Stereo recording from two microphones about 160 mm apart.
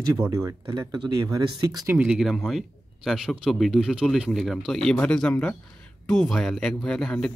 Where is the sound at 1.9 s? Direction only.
5° right (ahead or behind).